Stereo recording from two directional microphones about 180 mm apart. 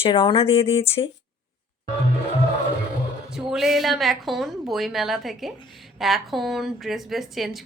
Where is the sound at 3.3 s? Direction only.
Centre (ahead or behind).